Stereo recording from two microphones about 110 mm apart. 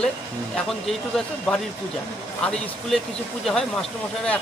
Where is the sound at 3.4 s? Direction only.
5° left (ahead or behind).